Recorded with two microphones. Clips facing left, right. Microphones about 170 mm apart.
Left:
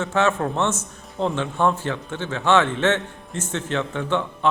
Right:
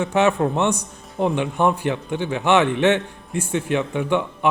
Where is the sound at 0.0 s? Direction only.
15° right (ahead or behind).